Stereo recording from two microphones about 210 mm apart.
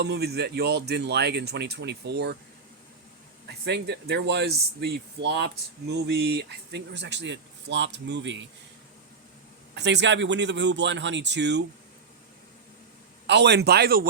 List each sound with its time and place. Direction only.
0.0 s speech: 50° right (ahead or behind)
3.4 s speech: 50° right (ahead or behind)
9.7 s speech: 55° right (ahead or behind)
13.2 s speech: 55° right (ahead or behind)